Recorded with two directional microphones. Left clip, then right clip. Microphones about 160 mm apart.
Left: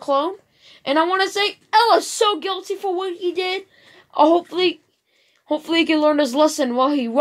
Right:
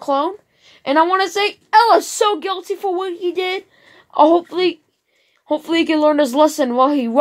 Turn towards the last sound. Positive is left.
turn(degrees=-50)  # may be behind; listen again after turning